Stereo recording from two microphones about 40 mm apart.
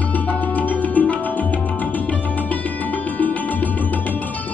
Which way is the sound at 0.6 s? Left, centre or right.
Left.